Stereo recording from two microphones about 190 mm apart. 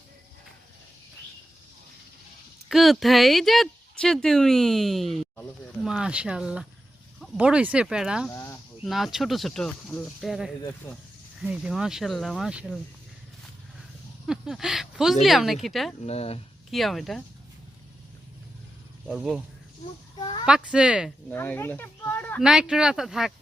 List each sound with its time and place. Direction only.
2.6 s speech: centre (ahead or behind)
8.3 s speech: 15° left (ahead or behind)
8.8 s speech: centre (ahead or behind)
14.3 s speech: 5° right (ahead or behind)
16.0 s speech: 35° left (ahead or behind)
16.7 s speech: centre (ahead or behind)
19.0 s speech: centre (ahead or behind)
20.1 s a sound: 25° left (ahead or behind)
20.4 s speech: 5° right (ahead or behind)
21.2 s speech: 10° left (ahead or behind)
22.4 s speech: 5° right (ahead or behind)